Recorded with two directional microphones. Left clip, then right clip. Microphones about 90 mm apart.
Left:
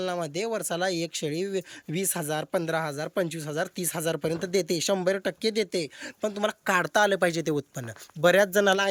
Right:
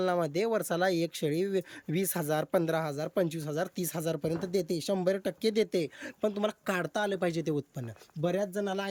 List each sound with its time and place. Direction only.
0.0 s speech: 30° right (ahead or behind); by 4.9 s centre (ahead or behind)
4.9 s speech: 10° right (ahead or behind)
5.5 s speech: 25° right (ahead or behind); by 7.9 s 5° right (ahead or behind)
8.2 s speech: 10° left (ahead or behind)